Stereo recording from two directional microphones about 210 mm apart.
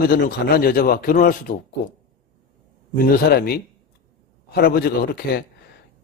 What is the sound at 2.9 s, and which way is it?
A man's voice, 45° left (ahead or behind).